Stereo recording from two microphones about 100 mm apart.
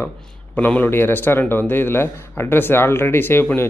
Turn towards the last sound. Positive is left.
turn(degrees=25)  # may be behind; listen again after turning